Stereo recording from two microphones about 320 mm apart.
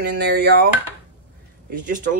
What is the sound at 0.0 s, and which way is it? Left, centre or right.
Speech, right.